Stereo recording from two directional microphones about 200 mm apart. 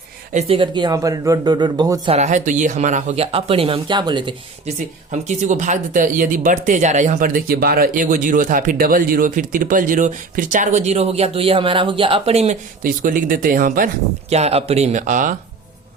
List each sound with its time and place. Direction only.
0.3 s speech: 30° right (ahead or behind)
2.1 s speech: 35° right (ahead or behind)
5.1 s speech: 35° right (ahead or behind)
12.8 s speech: 45° right (ahead or behind)